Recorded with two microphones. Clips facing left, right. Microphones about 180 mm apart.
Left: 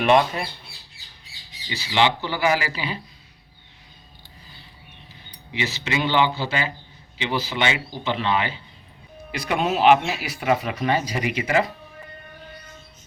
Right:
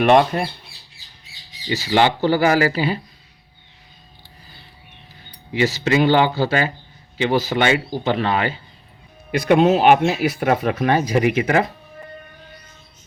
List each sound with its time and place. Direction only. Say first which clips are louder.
0.0 s speech: right 4 dB; 50° right (ahead or behind)
1.7 s speech: right 4 dB; 45° right (ahead or behind)
5.5 s speech: right 9 dB; 45° right (ahead or behind)
9.3 s speech: right 9 dB; 55° right (ahead or behind)